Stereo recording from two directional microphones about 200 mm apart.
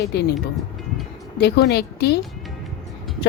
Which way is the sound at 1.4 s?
55° left (ahead or behind).